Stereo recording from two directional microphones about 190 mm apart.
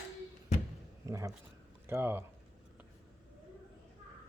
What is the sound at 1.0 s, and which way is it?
A man's voice, 15° right (ahead or behind).